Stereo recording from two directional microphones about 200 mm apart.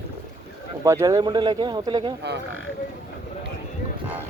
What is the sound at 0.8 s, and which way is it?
Speech, 15° right (ahead or behind).